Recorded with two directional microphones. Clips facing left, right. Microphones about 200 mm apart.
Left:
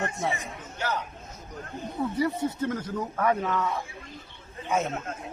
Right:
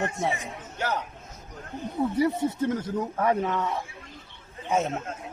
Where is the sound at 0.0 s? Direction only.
20° right (ahead or behind).